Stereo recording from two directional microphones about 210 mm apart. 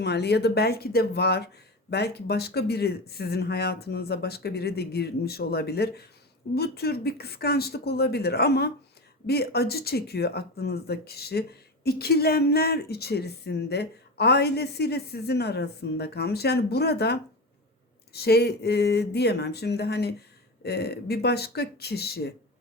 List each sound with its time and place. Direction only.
0.0 s speech: 55° left (ahead or behind)